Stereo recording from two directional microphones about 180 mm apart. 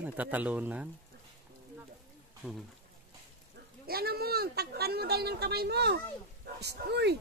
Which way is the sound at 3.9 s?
60° right (ahead or behind).